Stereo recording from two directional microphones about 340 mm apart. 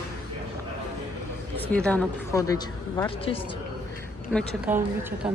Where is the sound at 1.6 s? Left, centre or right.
Centre.